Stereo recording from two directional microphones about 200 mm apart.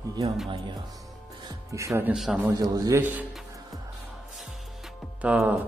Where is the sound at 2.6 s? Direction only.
15° right (ahead or behind).